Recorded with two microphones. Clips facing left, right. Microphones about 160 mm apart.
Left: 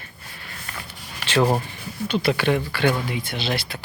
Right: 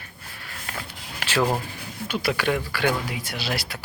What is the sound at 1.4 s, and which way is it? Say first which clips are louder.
Speech: left 3 dB; 15° left (ahead or behind).